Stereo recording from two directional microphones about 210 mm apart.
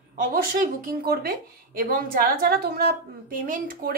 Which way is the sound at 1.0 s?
45° right (ahead or behind).